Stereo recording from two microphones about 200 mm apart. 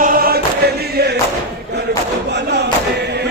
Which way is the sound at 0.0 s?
45° right (ahead or behind).